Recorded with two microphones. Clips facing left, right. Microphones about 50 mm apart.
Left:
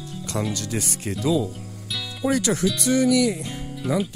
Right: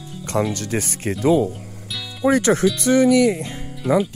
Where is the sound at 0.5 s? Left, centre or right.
Right.